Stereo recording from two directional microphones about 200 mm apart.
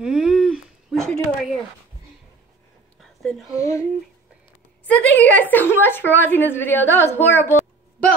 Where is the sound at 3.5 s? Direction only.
15° left (ahead or behind).